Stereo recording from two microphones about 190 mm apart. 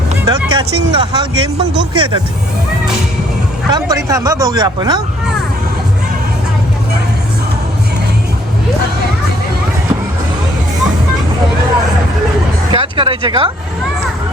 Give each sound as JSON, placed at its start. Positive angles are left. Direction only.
{"t": 0.3, "sound": "speech", "side_deg": -25}
{"t": 3.7, "sound": "speech", "side_deg": -20}
{"t": 12.7, "sound": "speech", "side_deg": -25}